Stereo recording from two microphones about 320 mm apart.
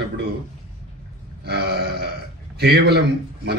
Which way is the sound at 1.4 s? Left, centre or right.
Right.